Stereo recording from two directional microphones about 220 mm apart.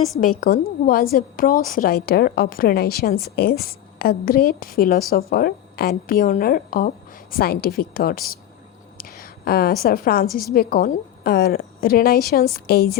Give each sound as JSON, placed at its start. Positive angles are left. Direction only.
{"t": 0.2, "sound": "a woman's voice", "side_deg": 40}